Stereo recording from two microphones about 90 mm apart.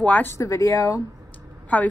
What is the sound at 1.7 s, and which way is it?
Speech, 15° left (ahead or behind).